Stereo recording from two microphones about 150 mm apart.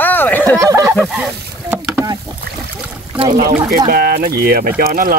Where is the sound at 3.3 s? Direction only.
75° right (ahead or behind).